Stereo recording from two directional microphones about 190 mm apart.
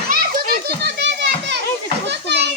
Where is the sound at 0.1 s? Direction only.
50° right (ahead or behind).